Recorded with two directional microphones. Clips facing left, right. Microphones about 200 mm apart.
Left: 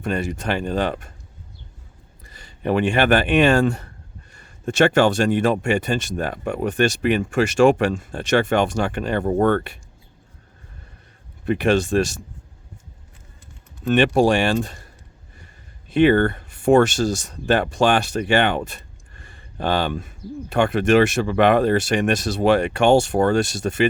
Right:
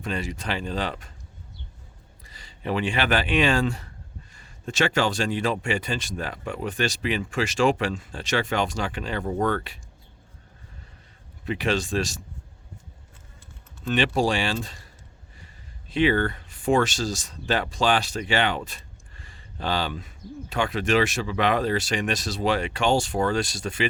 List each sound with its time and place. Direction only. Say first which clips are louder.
0.0 s speech: left 6 dB; 55° left (ahead or behind)
2.2 s speech: left 7 dB; 55° left (ahead or behind)
11.4 s speech: left 7 dB; 55° left (ahead or behind)
13.8 s speech: left 7 dB; 55° left (ahead or behind)
15.9 s speech: left 7 dB; 55° left (ahead or behind)